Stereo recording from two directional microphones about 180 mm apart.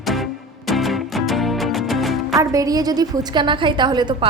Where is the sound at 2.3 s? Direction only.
20° right (ahead or behind).